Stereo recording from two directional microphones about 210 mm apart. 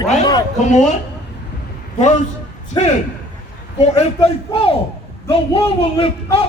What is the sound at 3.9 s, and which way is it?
A man's voice, 30° left (ahead or behind).